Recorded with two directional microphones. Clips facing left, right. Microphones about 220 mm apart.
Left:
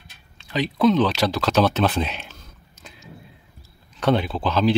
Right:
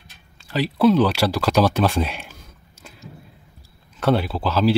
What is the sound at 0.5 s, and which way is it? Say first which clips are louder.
Speech: right 2 dB; 5° right (ahead or behind).